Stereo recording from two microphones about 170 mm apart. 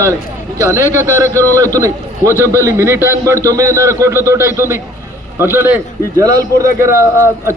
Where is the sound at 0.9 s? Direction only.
15° right (ahead or behind).